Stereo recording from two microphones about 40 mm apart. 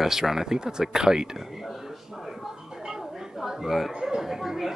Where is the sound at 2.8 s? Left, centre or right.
Centre.